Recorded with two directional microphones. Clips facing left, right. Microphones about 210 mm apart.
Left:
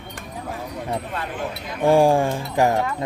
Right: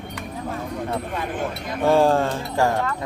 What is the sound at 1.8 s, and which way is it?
Speech, 15° left (ahead or behind).